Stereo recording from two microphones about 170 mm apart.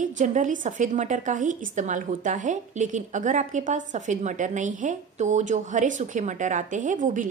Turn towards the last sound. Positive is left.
turn(degrees=-50)  # may be behind; listen again after turning